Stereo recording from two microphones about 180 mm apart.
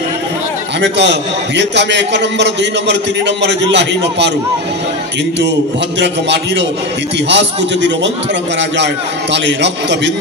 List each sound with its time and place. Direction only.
0.7 s a man's voice: 75° right (ahead or behind)
5.9 s a man's voice: 75° right (ahead or behind)